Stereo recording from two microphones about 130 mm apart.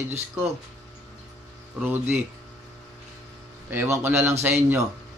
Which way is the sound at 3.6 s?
15° right (ahead or behind).